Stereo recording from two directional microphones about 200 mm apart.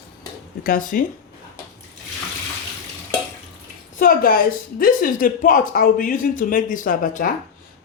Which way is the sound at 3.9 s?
45° left (ahead or behind).